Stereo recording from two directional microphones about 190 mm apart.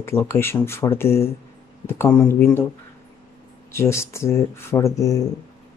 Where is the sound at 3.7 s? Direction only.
15° left (ahead or behind).